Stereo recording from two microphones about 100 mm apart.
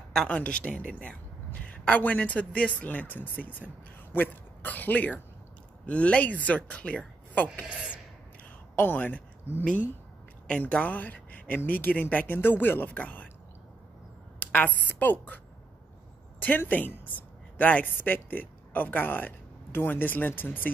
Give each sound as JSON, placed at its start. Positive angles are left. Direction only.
{"t": 0.3, "sound": "a woman's voice", "side_deg": 10}
{"t": 8.7, "sound": "a woman's voice", "side_deg": 20}
{"t": 14.4, "sound": "a woman's voice", "side_deg": 15}